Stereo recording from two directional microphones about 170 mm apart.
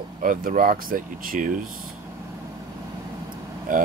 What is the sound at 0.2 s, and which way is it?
Speech, 50° right (ahead or behind).